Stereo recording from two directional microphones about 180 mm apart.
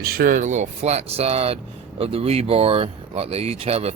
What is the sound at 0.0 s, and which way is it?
Speech, 55° right (ahead or behind).